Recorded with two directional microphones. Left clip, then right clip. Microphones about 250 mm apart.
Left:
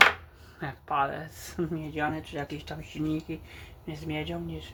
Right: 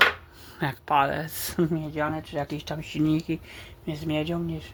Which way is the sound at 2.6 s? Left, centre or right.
Right.